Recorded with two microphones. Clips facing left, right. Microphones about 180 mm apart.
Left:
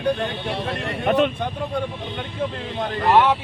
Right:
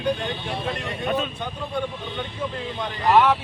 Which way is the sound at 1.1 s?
70° left (ahead or behind).